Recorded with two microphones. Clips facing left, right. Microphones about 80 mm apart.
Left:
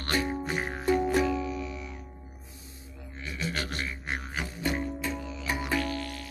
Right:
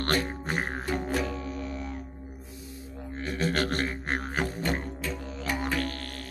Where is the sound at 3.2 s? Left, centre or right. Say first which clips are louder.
Right 6 dB; right.